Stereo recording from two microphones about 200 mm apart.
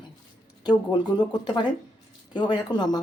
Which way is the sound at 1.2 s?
20° left (ahead or behind).